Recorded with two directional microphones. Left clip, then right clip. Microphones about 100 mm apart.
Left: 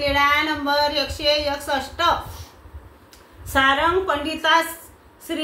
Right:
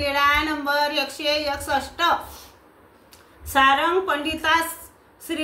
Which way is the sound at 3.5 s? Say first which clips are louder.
Even; 35° right (ahead or behind).